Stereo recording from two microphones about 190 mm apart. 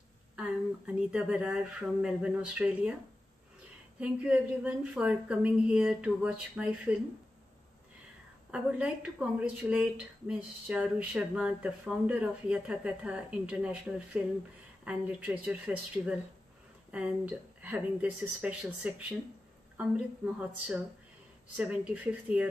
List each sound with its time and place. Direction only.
0.4 s speech: 5° right (ahead or behind)
4.0 s speech: 5° right (ahead or behind)
8.5 s speech: 5° right (ahead or behind)
20.3 s speech: 5° right (ahead or behind)